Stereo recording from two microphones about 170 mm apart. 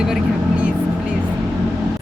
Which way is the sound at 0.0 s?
5° right (ahead or behind).